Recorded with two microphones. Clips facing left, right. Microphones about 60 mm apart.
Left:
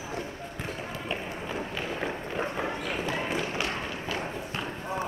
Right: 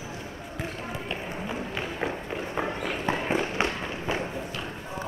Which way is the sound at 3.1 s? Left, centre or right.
Right.